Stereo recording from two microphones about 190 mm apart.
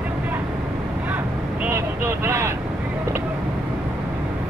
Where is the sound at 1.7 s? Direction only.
15° right (ahead or behind).